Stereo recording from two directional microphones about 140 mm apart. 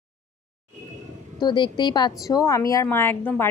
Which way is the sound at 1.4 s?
35° left (ahead or behind).